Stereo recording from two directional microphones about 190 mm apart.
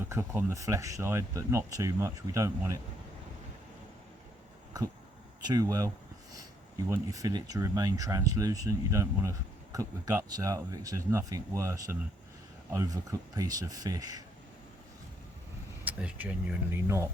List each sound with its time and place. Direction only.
0.0 s speech: 10° right (ahead or behind)
5.5 s speech: 20° right (ahead or behind)
6.9 s speech: 20° right (ahead or behind)
15.8 s speech: 5° right (ahead or behind)